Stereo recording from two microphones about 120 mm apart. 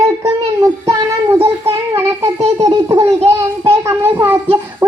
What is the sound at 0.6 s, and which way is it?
Speech, 25° right (ahead or behind).